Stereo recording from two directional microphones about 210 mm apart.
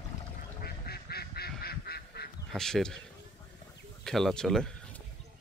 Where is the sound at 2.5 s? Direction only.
Centre (ahead or behind).